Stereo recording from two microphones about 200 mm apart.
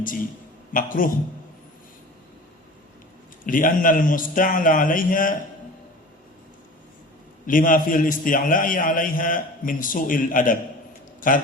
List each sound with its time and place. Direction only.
0.0 s a man's voice: 45° left (ahead or behind)
3.4 s a man's voice: 45° left (ahead or behind)
7.4 s a man's voice: 45° left (ahead or behind)